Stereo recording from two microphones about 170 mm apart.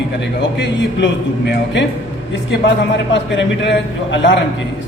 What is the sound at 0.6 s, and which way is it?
Speech, 90° left.